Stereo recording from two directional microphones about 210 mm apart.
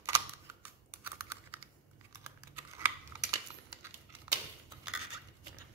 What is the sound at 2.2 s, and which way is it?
Typing, 10° right (ahead or behind).